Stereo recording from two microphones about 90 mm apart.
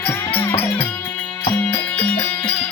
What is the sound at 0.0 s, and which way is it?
Music, 20° left (ahead or behind).